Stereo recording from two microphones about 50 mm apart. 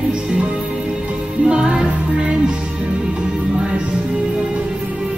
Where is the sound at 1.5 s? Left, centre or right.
Right.